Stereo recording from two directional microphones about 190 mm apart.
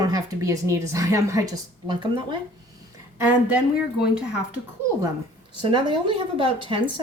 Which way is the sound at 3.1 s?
10° right (ahead or behind).